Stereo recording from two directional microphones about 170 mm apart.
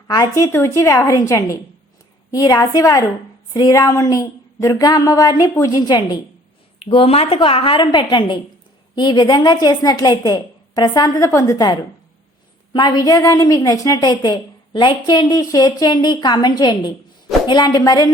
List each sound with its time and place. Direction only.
0.1 s a woman's voice: 20° left (ahead or behind)